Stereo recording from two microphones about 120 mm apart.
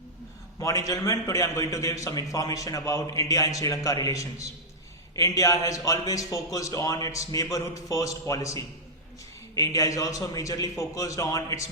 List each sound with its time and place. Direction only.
0.6 s a man's voice: 30° left (ahead or behind)